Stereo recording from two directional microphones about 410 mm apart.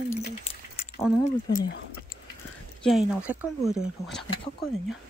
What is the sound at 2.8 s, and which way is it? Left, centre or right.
Speech, centre.